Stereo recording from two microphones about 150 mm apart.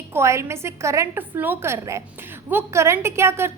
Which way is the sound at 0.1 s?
20° right (ahead or behind).